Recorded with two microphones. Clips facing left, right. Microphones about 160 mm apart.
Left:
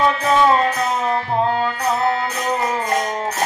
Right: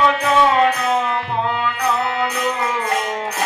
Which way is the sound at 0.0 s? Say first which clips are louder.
Even; 35° left (ahead or behind).